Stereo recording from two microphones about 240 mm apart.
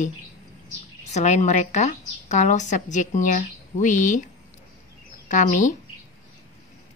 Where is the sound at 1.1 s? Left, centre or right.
Left.